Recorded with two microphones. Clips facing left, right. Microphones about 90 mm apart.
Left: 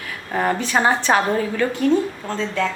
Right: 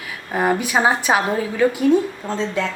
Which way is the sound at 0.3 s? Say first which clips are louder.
Right 2 dB; 10° right (ahead or behind).